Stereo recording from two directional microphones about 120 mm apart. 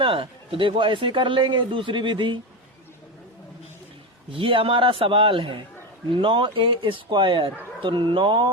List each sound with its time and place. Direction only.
0.0 s a man's voice: 50° right (ahead or behind)
4.3 s a man's voice: 45° right (ahead or behind)